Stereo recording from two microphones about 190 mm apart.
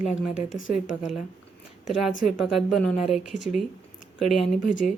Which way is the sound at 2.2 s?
Centre (ahead or behind).